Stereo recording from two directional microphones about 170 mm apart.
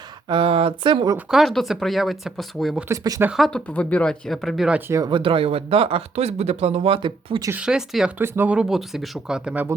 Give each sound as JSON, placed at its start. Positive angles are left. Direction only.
{"t": 0.3, "sound": "speech", "side_deg": -30}
{"t": 1.3, "sound": "speech", "side_deg": 0}
{"t": 2.9, "sound": "speech", "side_deg": -20}
{"t": 3.2, "sound": "speech", "side_deg": 0}
{"t": 4.9, "sound": "speech", "side_deg": -20}
{"t": 7.5, "sound": "speech", "side_deg": -5}